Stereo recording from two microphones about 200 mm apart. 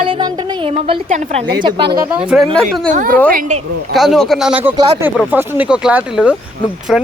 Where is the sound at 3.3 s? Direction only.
40° right (ahead or behind).